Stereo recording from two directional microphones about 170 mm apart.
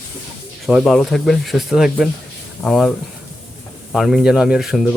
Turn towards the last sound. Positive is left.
turn(degrees=0)  # may be behind; listen again after turning